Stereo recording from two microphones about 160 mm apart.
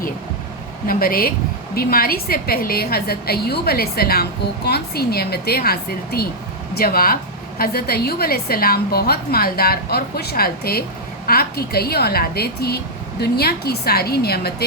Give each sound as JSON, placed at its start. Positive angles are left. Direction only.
{"t": 0.9, "sound": "a woman's voice", "side_deg": 65}